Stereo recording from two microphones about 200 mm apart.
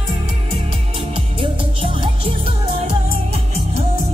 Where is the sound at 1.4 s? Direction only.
25° right (ahead or behind).